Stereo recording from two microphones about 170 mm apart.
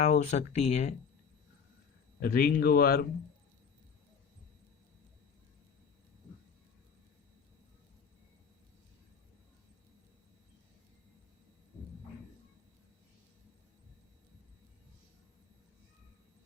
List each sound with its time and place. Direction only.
0.0 s speech: 40° left (ahead or behind)
2.2 s speech: 55° left (ahead or behind)